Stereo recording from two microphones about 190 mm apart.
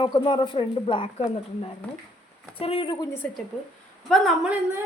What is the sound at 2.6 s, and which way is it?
Speech, 30° left (ahead or behind).